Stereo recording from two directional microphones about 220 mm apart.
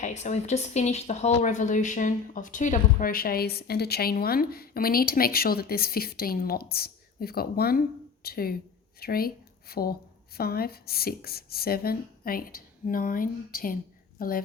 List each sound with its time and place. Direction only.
0.0 s a woman's voice: 30° left (ahead or behind)